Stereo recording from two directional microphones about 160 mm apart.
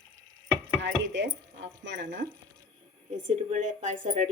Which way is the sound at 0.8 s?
90° right.